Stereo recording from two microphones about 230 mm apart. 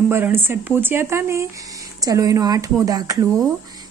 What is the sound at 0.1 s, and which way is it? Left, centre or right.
Speech, centre.